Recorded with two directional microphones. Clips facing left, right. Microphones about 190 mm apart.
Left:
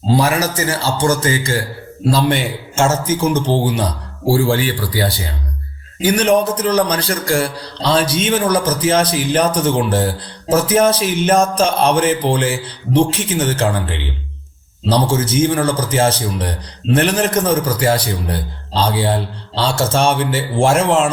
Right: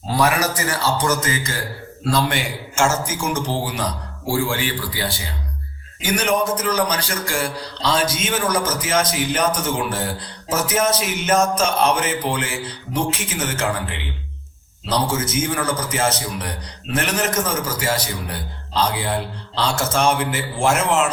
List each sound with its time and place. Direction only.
0.1 s a man's voice: 25° left (ahead or behind)